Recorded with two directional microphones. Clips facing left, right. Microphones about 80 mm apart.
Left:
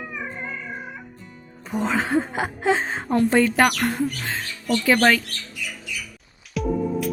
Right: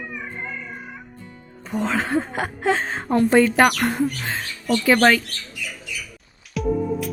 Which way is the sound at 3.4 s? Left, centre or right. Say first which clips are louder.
Right 2 dB; centre.